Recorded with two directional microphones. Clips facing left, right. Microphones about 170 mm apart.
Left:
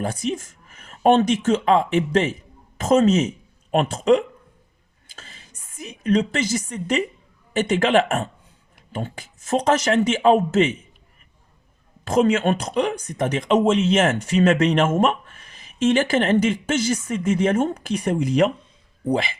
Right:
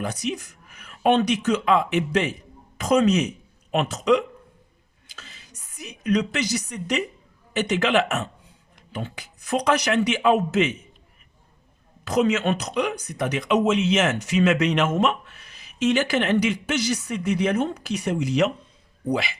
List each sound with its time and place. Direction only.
0.0 s speech: 50° left (ahead or behind)
5.0 s a sound: 45° left (ahead or behind)
6.3 s speech: 50° left (ahead or behind)
12.0 s speech: 50° left (ahead or behind)